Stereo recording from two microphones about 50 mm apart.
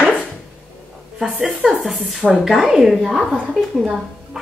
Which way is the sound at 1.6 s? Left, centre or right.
Centre.